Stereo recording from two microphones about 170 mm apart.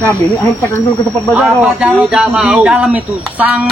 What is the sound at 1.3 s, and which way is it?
A man's voice, centre (ahead or behind).